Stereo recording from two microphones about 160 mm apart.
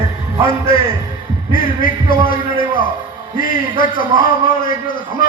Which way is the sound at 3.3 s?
60° left (ahead or behind).